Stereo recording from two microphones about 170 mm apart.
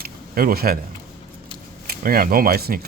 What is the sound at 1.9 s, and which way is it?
Speech, 60° right (ahead or behind).